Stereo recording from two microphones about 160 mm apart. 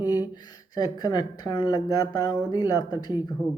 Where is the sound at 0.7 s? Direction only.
25° left (ahead or behind).